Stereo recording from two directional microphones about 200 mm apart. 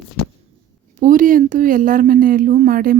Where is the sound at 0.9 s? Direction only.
40° right (ahead or behind).